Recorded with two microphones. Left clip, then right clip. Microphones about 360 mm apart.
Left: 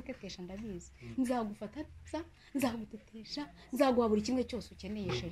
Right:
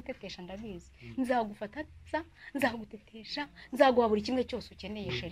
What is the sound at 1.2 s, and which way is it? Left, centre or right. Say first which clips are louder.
Speech: right 7 dB; right.